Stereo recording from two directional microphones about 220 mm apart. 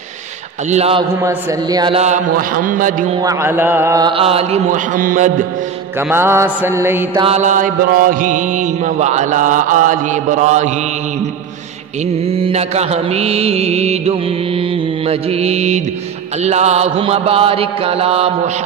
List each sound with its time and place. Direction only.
0.7 s music: 30° right (ahead or behind)
1.2 s mantra: 15° right (ahead or behind); by 3.1 s 35° right (ahead or behind)
3.2 s music: 15° right (ahead or behind); by 5.3 s 35° right (ahead or behind)
5.9 s mantra: 10° right (ahead or behind)
7.2 s mantra: 30° right (ahead or behind)
12.3 s music: 25° right (ahead or behind)